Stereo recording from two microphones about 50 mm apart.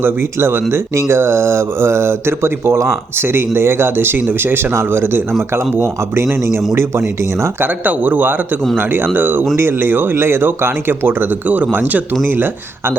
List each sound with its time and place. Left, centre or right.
0.0 s speech: right
7.6 s speech: right
12.2 s speech: right